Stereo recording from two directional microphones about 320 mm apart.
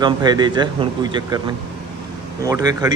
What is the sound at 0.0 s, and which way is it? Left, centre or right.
A man's voice, centre.